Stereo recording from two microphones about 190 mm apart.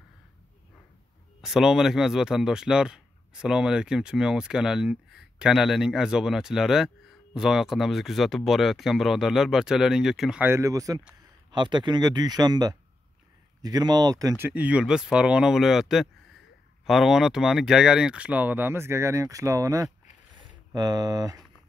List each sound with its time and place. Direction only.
1.4 s speech: centre (ahead or behind); by 21.4 s 20° right (ahead or behind)